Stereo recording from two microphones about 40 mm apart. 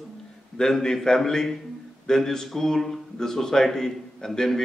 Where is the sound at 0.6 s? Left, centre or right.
Centre.